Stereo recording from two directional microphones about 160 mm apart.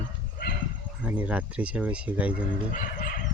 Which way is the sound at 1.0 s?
10° right (ahead or behind).